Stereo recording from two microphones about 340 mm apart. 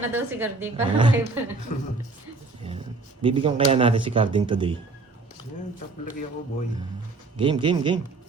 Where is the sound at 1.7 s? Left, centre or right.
Left.